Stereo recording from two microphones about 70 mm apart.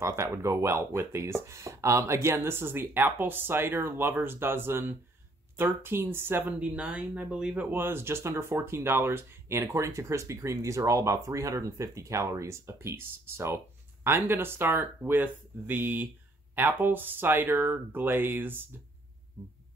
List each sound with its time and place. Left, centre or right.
0.0 s speech: right; by 7.6 s centre
7.7 s speech: right
9.7 s speech: right
19.4 s heart sounds: right